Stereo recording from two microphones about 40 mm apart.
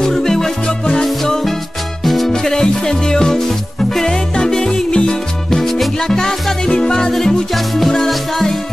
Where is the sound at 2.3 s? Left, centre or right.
Centre.